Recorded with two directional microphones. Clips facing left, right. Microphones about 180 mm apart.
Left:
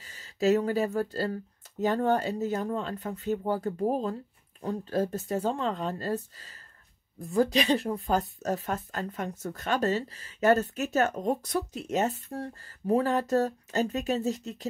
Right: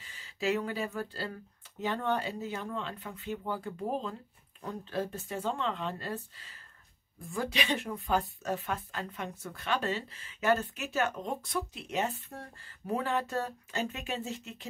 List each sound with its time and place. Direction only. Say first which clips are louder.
0.0 s speech: left 7 dB; 40° left (ahead or behind)